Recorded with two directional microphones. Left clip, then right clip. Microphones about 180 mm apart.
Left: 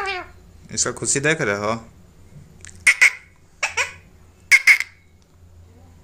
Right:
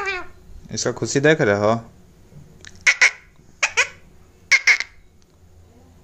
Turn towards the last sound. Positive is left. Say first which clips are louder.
# left 2 dB
turn(degrees=-25)  # may be behind; listen again after turning